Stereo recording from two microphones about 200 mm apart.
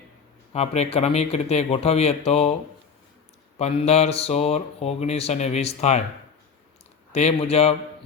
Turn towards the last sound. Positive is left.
turn(degrees=30)  # may be behind; listen again after turning